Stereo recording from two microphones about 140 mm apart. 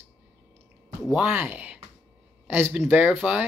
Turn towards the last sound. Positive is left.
turn(degrees=-10)  # may be behind; listen again after turning